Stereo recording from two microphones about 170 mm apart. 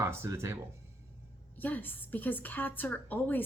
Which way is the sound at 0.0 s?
15° right (ahead or behind).